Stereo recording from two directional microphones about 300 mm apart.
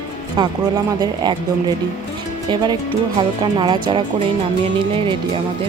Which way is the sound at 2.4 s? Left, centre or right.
Centre.